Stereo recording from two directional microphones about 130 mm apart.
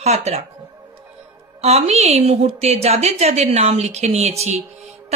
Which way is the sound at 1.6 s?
55° right (ahead or behind).